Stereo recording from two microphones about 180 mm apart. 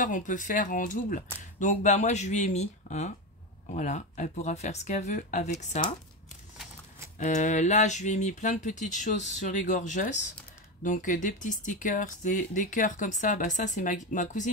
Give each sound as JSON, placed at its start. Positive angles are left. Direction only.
{"t": 0.0, "sound": "speech", "side_deg": 45}
{"t": 7.2, "sound": "speech", "side_deg": 40}